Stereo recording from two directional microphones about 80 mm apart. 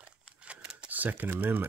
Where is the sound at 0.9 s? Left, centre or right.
Right.